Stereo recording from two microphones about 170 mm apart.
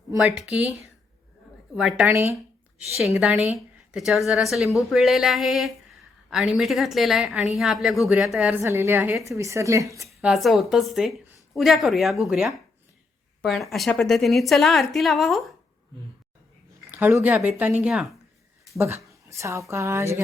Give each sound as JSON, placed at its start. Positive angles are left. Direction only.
{"t": 0.2, "sound": "a woman's voice", "side_deg": -5}
{"t": 1.7, "sound": "a woman's voice", "side_deg": -5}
{"t": 2.0, "sound": "a woman's voice", "side_deg": -15}
{"t": 8.6, "sound": "speech", "side_deg": -15}
{"t": 10.2, "sound": "a woman's voice", "side_deg": 0}
{"t": 16.9, "sound": "a woman's voice", "side_deg": -15}
{"t": 19.0, "sound": "a woman's voice", "side_deg": -15}